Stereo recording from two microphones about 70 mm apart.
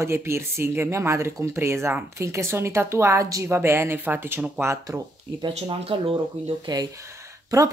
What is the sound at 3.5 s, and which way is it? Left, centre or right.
Speech, right.